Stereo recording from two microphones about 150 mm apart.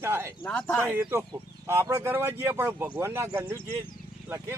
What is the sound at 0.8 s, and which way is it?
Speech, 10° right (ahead or behind).